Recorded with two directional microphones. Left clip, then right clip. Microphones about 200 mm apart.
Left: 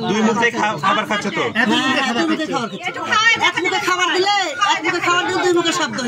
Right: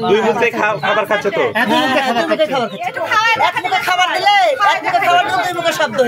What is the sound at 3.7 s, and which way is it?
Speech, 25° right (ahead or behind).